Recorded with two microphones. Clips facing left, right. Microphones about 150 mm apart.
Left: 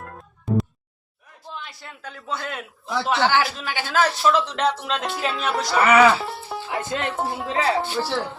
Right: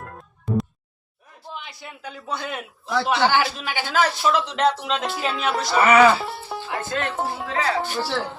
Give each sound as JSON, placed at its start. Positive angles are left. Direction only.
{"t": 0.0, "sound": "music", "side_deg": 0}
{"t": 1.5, "sound": "a man's voice", "side_deg": -15}
{"t": 7.5, "sound": "speech", "side_deg": 25}
{"t": 7.9, "sound": "speech", "side_deg": 0}